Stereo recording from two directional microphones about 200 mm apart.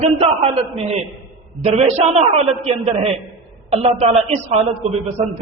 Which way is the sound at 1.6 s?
30° right (ahead or behind).